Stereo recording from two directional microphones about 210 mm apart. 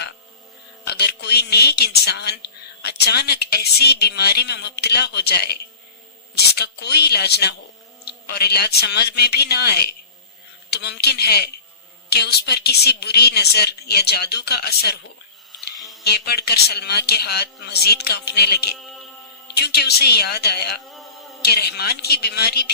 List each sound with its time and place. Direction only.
0.9 s a man's voice: 50° left (ahead or behind)
15.5 s a sound: centre (ahead or behind)
16.0 s a man's voice: 50° left (ahead or behind)